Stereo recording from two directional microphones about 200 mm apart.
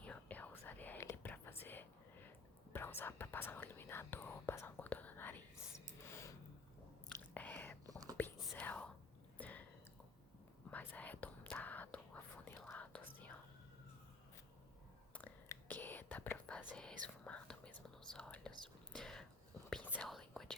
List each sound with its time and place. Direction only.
0.0 s whispering: 5° left (ahead or behind)
7.3 s whispering: 10° left (ahead or behind)
7.9 s whispering: 20° right (ahead or behind)
8.4 s whispering: 10° left (ahead or behind)
9.4 s a sound: 10° left (ahead or behind)
10.7 s whispering: 10° left (ahead or behind)
15.1 s whispering: 10° left (ahead or behind)